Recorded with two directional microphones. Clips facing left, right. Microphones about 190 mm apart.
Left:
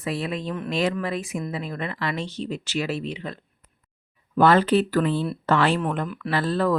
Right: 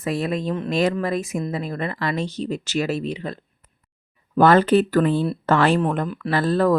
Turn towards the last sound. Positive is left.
turn(degrees=-45)  # may be behind; listen again after turning